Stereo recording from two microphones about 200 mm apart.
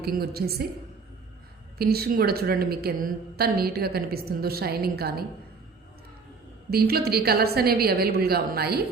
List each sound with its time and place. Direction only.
0.0 s a woman's voice: 50° right (ahead or behind)
1.8 s a woman's voice: 50° right (ahead or behind)
6.7 s a woman's voice: 50° right (ahead or behind)